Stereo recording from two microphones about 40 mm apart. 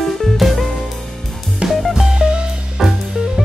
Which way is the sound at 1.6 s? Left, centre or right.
Right.